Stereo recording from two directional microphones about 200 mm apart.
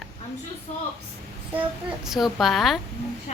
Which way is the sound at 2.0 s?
Centre (ahead or behind).